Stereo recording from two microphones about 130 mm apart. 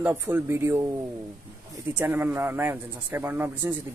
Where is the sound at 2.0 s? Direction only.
15° right (ahead or behind).